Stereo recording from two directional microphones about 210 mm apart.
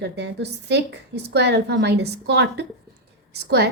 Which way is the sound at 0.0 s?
55° right (ahead or behind).